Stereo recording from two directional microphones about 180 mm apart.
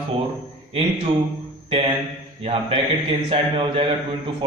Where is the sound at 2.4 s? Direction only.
30° right (ahead or behind).